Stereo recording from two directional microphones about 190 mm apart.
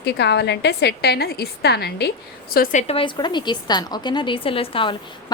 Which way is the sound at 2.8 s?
30° left (ahead or behind).